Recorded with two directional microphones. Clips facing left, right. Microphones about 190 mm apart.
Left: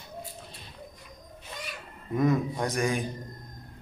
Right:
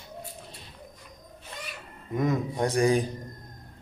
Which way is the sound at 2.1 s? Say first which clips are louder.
Left 2 dB; 20° right (ahead or behind).